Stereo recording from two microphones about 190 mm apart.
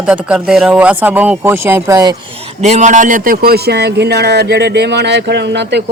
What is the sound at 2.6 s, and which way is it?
A man's voice, 40° right (ahead or behind).